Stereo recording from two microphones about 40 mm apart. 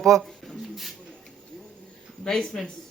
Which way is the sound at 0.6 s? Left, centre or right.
Centre.